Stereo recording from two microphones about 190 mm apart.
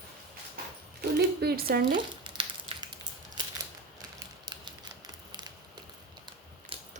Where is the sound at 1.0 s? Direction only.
55° right (ahead or behind).